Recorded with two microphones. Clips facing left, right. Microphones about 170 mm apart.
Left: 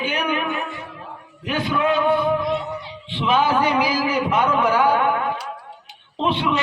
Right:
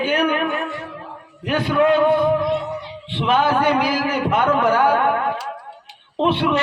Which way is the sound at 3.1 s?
55° right (ahead or behind).